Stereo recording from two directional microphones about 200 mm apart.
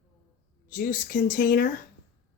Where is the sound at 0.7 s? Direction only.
40° left (ahead or behind).